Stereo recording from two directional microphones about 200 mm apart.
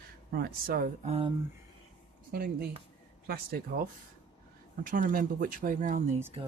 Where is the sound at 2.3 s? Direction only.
50° right (ahead or behind).